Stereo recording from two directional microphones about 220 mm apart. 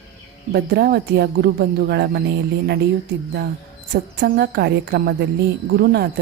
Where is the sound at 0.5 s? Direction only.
45° right (ahead or behind).